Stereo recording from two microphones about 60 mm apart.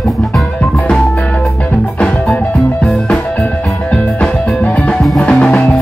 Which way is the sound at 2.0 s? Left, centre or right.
Left.